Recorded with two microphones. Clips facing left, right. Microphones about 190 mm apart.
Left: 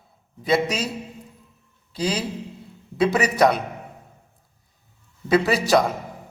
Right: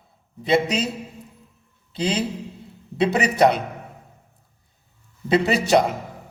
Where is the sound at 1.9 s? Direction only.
25° right (ahead or behind).